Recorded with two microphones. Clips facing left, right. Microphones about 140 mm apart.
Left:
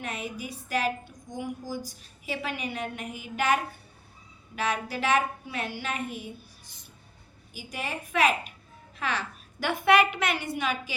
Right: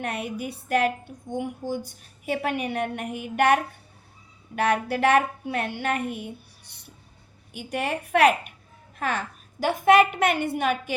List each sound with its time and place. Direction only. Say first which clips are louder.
0.0 s a woman's voice: right 5 dB; 60° right (ahead or behind)
9.0 s a woman's voice: right 3 dB; 50° right (ahead or behind)